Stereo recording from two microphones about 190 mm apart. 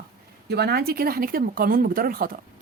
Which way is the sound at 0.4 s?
60° right (ahead or behind).